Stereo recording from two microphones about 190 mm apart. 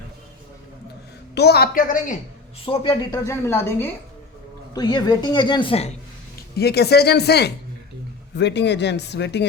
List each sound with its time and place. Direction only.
1.4 s speech: 60° left (ahead or behind)
2.6 s a woman's voice: 30° left (ahead or behind)
3.2 s a woman's voice: 15° left (ahead or behind); by 5.9 s 30° left (ahead or behind)
6.6 s speech: 55° left (ahead or behind)